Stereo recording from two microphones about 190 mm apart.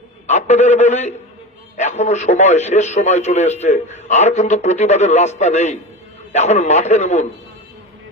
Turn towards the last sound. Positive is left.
turn(degrees=35)  # may be behind; listen again after turning